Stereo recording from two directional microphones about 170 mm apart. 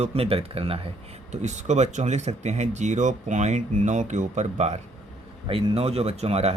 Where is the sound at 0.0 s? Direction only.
35° right (ahead or behind).